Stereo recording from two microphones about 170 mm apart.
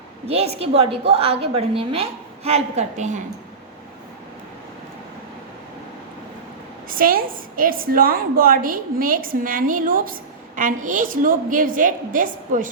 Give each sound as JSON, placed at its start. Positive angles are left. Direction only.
{"t": 0.3, "sound": "a woman's voice", "side_deg": -40}
{"t": 6.8, "sound": "a woman's voice", "side_deg": -55}